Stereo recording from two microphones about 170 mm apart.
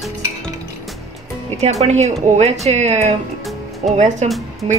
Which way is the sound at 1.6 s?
40° right (ahead or behind).